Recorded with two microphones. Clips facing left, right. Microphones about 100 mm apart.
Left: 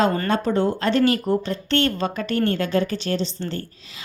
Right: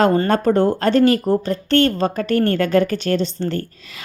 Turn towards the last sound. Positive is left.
turn(degrees=-50)  # may be behind; listen again after turning